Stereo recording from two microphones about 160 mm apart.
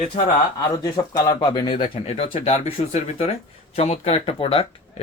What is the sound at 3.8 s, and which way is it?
Speech, 40° left (ahead or behind).